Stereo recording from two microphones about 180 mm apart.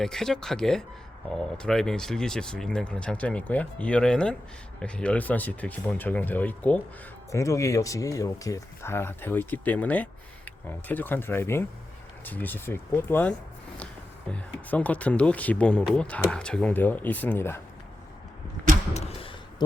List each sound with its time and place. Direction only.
0.0 s speech: 5° left (ahead or behind)
18.9 s speech: 35° left (ahead or behind)